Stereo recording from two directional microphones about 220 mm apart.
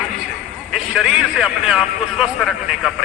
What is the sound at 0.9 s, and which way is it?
A man's voice, centre (ahead or behind).